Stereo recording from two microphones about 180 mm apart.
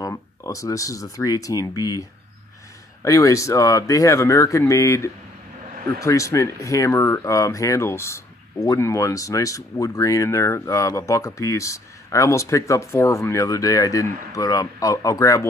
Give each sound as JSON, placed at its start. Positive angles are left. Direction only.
{"t": 0.0, "sound": "speech", "side_deg": 15}